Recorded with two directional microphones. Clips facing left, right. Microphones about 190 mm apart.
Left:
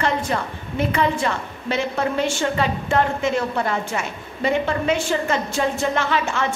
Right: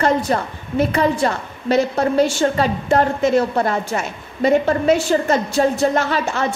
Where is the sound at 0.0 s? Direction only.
40° right (ahead or behind).